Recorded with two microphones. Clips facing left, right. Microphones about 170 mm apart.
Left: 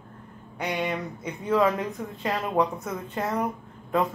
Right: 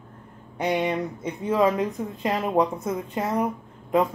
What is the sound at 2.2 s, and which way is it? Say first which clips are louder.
Speech: right 2 dB; 20° right (ahead or behind).